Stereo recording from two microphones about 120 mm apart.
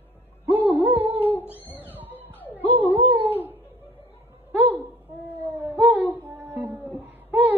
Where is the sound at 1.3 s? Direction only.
15° left (ahead or behind).